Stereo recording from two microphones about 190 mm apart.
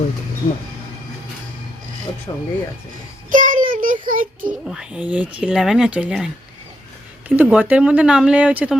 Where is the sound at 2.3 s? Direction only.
20° left (ahead or behind).